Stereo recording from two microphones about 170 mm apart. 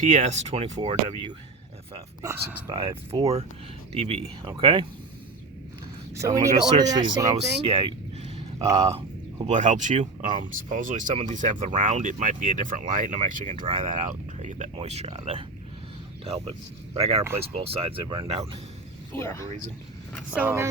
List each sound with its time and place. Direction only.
0.0 s speech: 45° right (ahead or behind)
2.2 s speech: 15° right (ahead or behind)
2.6 s speech: 30° right (ahead or behind)
6.1 s speech: 20° right (ahead or behind)
7.3 s a sound: 40° right (ahead or behind)
8.7 s speech: 40° right (ahead or behind)
16.9 s speech: 40° right (ahead or behind)
18.3 s speech: 40° right (ahead or behind)
20.3 s speech: 10° right (ahead or behind)